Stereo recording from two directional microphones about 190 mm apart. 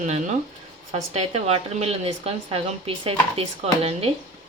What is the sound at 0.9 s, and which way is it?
Speech, 35° right (ahead or behind).